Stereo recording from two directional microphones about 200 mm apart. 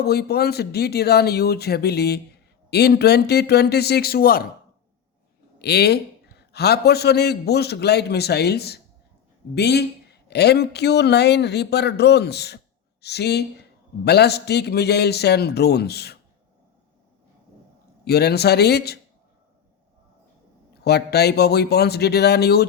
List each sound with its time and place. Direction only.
0.0 s speech: 55° left (ahead or behind)
5.5 s a man's voice: 55° left (ahead or behind)
18.0 s speech: 55° left (ahead or behind)
20.8 s speech: 55° left (ahead or behind)